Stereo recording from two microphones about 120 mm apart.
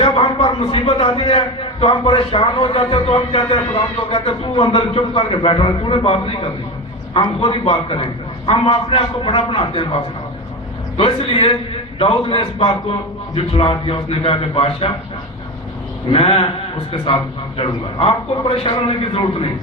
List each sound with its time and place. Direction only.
0.0 s a man's voice: 50° left (ahead or behind)
16.0 s a man's voice: 55° left (ahead or behind)
17.6 s a man's voice: 55° left (ahead or behind)